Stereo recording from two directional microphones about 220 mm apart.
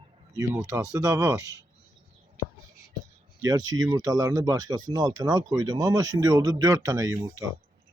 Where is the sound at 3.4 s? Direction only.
15° right (ahead or behind).